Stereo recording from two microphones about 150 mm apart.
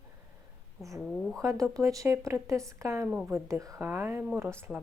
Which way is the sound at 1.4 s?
20° right (ahead or behind).